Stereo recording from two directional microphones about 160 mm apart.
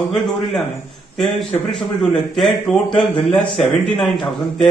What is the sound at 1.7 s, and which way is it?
A man's voice, 5° left (ahead or behind).